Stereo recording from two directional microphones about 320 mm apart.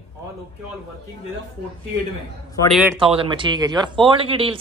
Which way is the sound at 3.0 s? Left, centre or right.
Centre.